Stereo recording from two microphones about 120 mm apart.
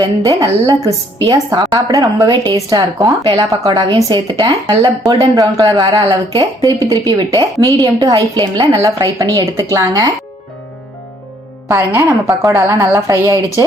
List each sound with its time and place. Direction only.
0.0 s a woman's voice: 30° right (ahead or behind)
3.2 s a woman's voice: 40° right (ahead or behind)
8.1 s a woman's voice: 45° right (ahead or behind)
8.8 s a woman's voice: 30° right (ahead or behind)
11.7 s a woman's voice: 30° right (ahead or behind)